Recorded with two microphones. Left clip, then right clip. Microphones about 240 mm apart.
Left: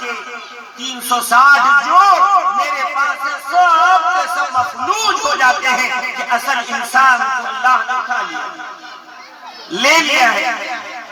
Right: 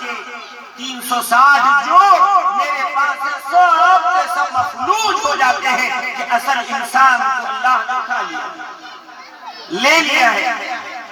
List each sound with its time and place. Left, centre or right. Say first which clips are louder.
1.0 s a man's voice: left 1 dB; left
3.2 s a sound: even; left
9.8 s a woman's voice: left 1 dB; left